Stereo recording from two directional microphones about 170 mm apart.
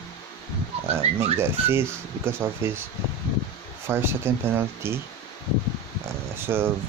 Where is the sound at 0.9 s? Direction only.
15° right (ahead or behind).